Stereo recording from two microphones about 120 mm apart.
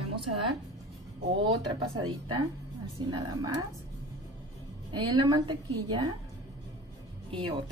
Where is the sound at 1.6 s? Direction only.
40° right (ahead or behind).